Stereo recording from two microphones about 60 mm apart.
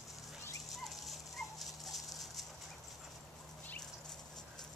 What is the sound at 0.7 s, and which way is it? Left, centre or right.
Dog, centre.